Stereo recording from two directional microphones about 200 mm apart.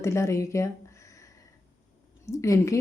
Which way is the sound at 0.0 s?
15° left (ahead or behind).